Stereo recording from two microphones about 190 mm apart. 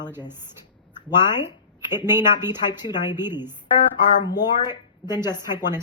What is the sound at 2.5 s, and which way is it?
A woman's voice, 20° left (ahead or behind).